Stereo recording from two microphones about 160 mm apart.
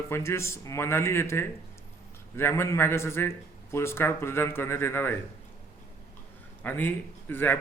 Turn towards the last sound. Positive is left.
turn(degrees=10)  # may be behind; listen again after turning